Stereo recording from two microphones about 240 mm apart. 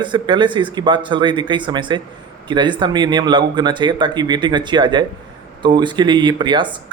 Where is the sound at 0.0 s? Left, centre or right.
Centre.